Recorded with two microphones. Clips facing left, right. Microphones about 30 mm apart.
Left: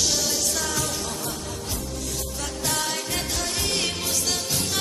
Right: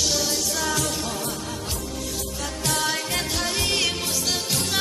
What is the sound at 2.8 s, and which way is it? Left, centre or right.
Music, right.